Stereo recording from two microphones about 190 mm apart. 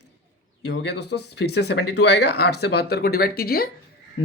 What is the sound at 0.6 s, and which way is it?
Speech, 60° left (ahead or behind).